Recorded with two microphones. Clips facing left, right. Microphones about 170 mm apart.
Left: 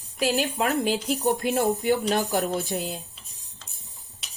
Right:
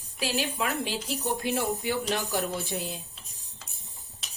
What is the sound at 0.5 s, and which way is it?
Speech, 50° left (ahead or behind).